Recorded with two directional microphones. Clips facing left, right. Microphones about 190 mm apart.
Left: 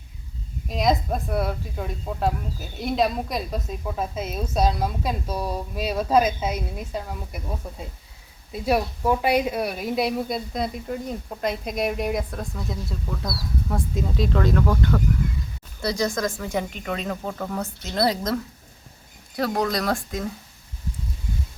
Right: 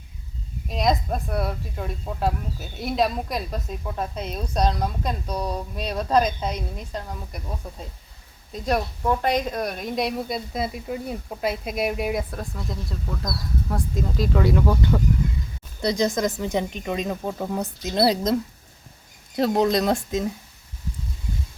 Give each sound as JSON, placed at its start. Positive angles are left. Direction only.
{"t": 0.7, "sound": "speech", "side_deg": 0}
{"t": 14.4, "sound": "speech", "side_deg": -10}
{"t": 19.4, "sound": "speech", "side_deg": -25}